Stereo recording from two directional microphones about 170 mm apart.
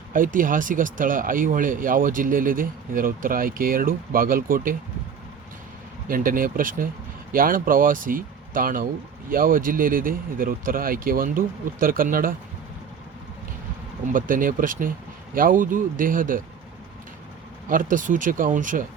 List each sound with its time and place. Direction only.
0.1 s speech: 55° right (ahead or behind)
6.1 s speech: 55° right (ahead or behind)
14.1 s speech: 55° right (ahead or behind)
17.7 s speech: 50° right (ahead or behind)